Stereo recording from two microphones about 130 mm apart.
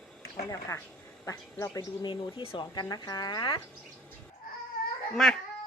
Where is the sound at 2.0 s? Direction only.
40° left (ahead or behind).